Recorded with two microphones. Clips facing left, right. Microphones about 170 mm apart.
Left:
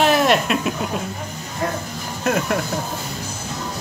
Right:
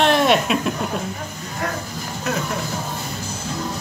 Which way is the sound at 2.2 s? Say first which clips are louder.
Left 5 dB; 55° left (ahead or behind).